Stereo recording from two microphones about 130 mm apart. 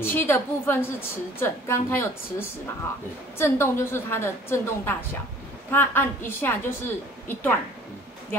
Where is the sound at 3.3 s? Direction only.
20° left (ahead or behind).